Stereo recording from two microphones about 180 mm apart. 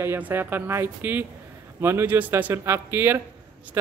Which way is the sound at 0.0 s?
10° right (ahead or behind).